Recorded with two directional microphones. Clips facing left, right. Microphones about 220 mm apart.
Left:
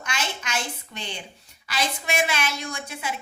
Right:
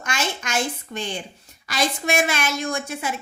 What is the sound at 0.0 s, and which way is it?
A woman's voice, 45° right (ahead or behind).